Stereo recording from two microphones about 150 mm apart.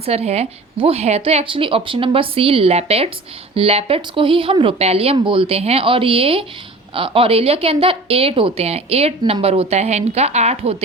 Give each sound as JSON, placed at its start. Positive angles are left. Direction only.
{"t": 0.0, "sound": "a woman's voice", "side_deg": -45}